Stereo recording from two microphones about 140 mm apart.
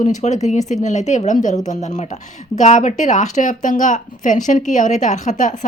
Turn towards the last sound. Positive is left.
turn(degrees=65)  # may be behind; listen again after turning